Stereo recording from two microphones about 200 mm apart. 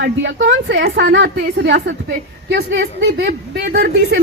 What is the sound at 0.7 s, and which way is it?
A woman's voice, 45° right (ahead or behind).